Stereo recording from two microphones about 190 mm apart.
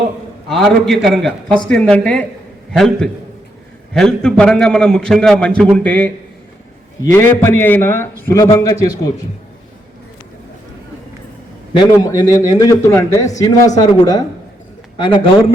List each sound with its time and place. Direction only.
0.4 s a man's voice: centre (ahead or behind); by 9.1 s 20° left (ahead or behind)
11.7 s a man's voice: 20° left (ahead or behind)